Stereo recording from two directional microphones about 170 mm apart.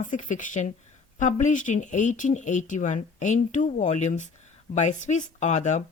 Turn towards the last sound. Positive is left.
turn(degrees=45)  # may be behind; listen again after turning